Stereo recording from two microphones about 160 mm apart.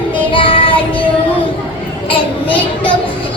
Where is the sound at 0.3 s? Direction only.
35° left (ahead or behind).